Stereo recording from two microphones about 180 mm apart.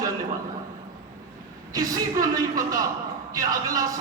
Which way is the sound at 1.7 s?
20° right (ahead or behind).